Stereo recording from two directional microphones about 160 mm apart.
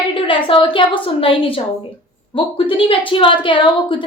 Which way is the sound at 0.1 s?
30° left (ahead or behind).